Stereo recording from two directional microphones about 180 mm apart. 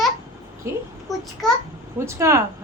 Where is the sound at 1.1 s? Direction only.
Centre (ahead or behind).